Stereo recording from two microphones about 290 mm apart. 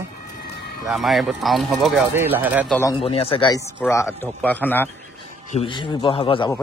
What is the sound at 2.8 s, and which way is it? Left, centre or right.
Speech, centre.